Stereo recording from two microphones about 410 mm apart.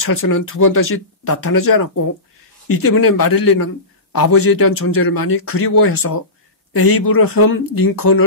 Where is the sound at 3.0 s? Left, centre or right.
Left.